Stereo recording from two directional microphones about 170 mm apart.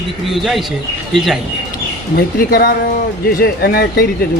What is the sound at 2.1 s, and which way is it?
Speech, 65° left (ahead or behind).